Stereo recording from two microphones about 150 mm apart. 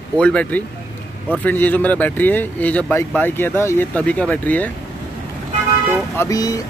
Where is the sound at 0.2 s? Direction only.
10° left (ahead or behind).